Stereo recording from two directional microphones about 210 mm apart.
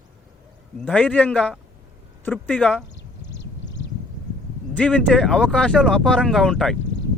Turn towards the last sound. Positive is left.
turn(degrees=0)  # may be behind; listen again after turning